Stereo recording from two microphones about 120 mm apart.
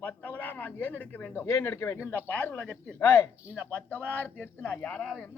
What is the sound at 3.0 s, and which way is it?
Speech, 25° left (ahead or behind).